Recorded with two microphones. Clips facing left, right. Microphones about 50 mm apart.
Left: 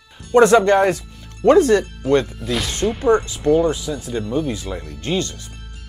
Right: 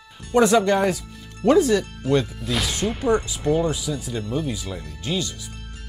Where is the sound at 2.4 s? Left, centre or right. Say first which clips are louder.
Left 2 dB; centre.